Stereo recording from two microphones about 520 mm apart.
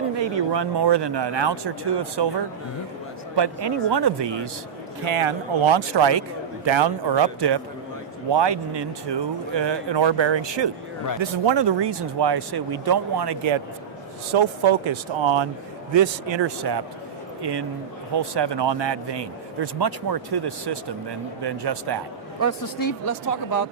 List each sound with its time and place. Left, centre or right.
0.2 s speech: right
3.3 s speech: right
5.0 s speech: right
22.4 s speech: left